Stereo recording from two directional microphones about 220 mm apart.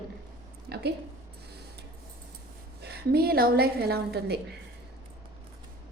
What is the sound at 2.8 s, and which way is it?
A woman's voice, 45° right (ahead or behind).